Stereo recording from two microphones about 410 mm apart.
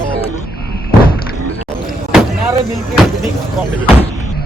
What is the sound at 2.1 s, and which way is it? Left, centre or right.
Speech, centre.